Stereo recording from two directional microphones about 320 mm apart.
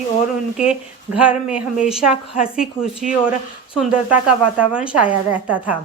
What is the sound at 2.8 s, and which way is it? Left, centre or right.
Speech, left.